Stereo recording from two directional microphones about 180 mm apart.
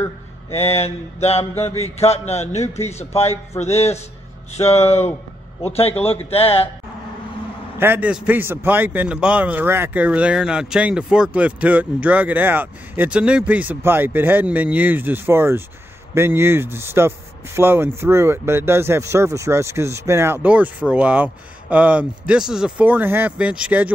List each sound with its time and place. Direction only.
0.5 s a man's voice: 35° left (ahead or behind)
1.5 s a sound: 15° left (ahead or behind)
1.8 s a man's voice: 35° left (ahead or behind)
7.8 s a man's voice: 10° right (ahead or behind)